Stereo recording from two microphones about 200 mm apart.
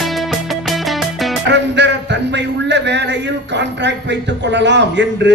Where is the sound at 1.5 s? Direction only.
60° right (ahead or behind).